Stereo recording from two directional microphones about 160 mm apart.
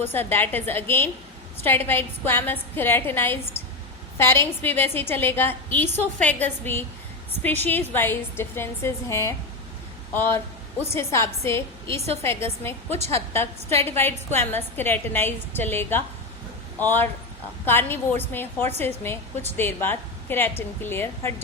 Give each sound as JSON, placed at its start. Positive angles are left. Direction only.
{"t": 0.0, "sound": "a woman's voice", "side_deg": 15}
{"t": 7.4, "sound": "a woman's voice", "side_deg": 10}